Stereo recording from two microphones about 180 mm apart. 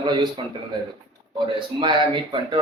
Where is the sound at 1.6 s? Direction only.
25° right (ahead or behind).